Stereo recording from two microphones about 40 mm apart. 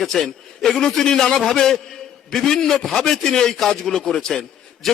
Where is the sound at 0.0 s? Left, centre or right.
Centre.